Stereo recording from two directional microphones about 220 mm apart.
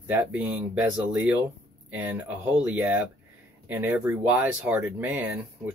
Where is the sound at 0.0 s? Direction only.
10° right (ahead or behind).